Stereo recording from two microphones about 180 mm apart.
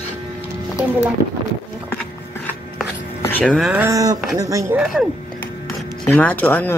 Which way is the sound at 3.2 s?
10° left (ahead or behind).